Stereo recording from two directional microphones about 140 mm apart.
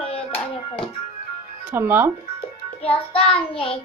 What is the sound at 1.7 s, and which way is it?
Speech, 15° right (ahead or behind).